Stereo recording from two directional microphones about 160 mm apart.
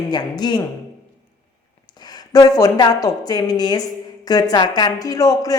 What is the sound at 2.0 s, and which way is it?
A woman's voice, 25° left (ahead or behind).